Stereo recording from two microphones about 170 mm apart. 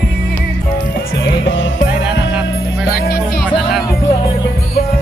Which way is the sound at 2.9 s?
65° left (ahead or behind).